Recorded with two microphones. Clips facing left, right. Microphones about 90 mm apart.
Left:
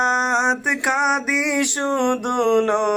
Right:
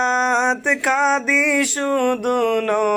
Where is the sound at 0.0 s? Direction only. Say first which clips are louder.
Right 1 dB; 10° left (ahead or behind).